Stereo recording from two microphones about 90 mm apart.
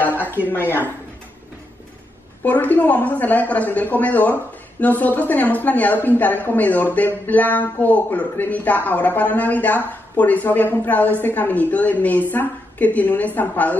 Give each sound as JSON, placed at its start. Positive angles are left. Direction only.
{"t": 0.0, "sound": "a sound", "side_deg": 20}
{"t": 0.5, "sound": "a woman's voice", "side_deg": 25}
{"t": 2.4, "sound": "a woman's voice", "side_deg": 20}